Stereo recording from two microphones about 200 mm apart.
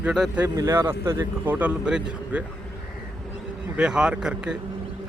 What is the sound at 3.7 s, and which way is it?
Speech, 5° right (ahead or behind).